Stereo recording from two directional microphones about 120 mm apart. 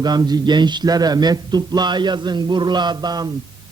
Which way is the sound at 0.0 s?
35° right (ahead or behind).